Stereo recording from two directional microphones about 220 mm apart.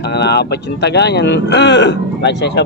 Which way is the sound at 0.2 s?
50° left (ahead or behind).